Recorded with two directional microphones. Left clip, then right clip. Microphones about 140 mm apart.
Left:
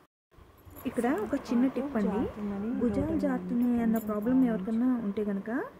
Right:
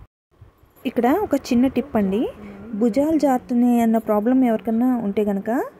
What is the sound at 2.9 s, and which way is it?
A woman's voice, 70° right (ahead or behind).